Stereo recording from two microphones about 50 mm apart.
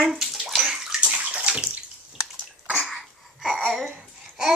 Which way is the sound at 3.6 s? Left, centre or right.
Centre.